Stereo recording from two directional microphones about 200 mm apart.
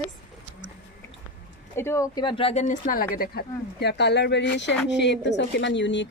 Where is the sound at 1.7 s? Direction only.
15° left (ahead or behind).